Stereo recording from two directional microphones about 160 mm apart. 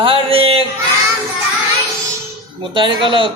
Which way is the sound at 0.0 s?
35° right (ahead or behind).